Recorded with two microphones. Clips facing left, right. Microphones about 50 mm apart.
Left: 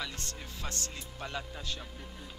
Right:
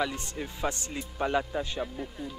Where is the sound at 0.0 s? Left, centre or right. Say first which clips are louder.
Right 9 dB; right.